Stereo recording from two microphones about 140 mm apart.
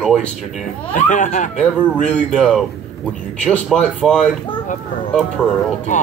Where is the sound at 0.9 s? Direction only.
65° left (ahead or behind).